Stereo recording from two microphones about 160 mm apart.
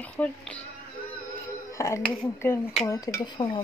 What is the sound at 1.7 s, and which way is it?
Speech, 20° left (ahead or behind).